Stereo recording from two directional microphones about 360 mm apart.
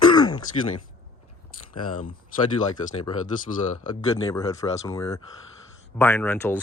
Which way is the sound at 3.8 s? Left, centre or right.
Centre.